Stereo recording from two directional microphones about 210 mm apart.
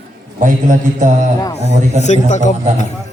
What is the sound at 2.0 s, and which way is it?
Speech, 35° left (ahead or behind).